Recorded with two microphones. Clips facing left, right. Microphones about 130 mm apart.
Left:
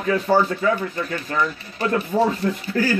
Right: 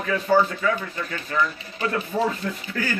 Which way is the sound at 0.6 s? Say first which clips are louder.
Left 4 dB; 30° left (ahead or behind).